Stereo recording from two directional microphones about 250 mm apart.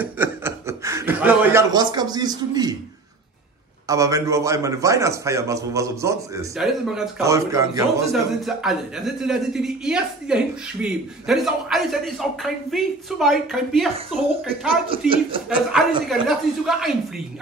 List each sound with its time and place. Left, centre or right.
0.0 s chuckle: centre
3.8 s a man's voice: centre
6.5 s a man's voice: centre
7.2 s a man's voice: centre
8.1 s a man's voice: centre
14.9 s speech: right
15.7 s a man's voice: centre